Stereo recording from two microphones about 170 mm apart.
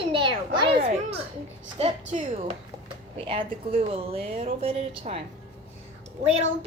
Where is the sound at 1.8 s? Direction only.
35° right (ahead or behind).